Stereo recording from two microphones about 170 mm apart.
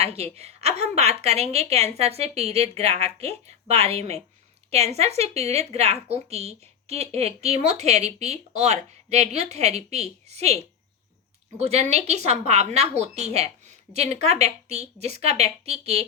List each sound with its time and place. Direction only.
0.0 s a woman's voice: 35° right (ahead or behind)